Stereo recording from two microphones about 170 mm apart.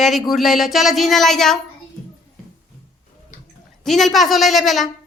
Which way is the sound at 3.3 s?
50° left (ahead or behind).